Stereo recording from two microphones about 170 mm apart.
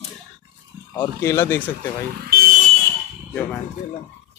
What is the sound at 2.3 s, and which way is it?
Vehicle, 60° right (ahead or behind).